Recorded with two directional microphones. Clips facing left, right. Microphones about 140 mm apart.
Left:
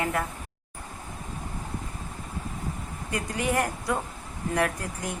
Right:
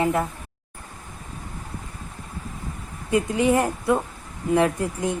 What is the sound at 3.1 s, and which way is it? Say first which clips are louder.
A woman's voice: right 8 dB; 20° right (ahead or behind).